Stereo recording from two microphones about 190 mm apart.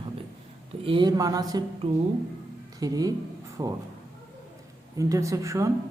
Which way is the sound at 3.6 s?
20° right (ahead or behind).